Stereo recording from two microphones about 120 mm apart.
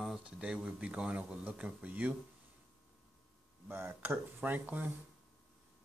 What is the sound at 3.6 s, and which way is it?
Speech, 15° right (ahead or behind).